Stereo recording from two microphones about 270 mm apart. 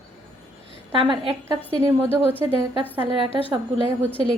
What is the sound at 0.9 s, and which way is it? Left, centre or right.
Speech, centre.